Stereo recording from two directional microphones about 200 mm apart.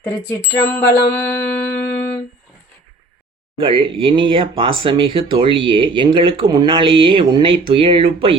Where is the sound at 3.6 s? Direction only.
25° right (ahead or behind).